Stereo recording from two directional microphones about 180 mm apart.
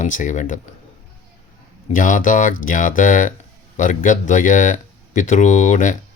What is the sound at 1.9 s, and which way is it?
Speech, 45° left (ahead or behind).